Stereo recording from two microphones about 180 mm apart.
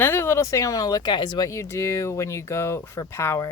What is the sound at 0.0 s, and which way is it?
Speech, 10° left (ahead or behind).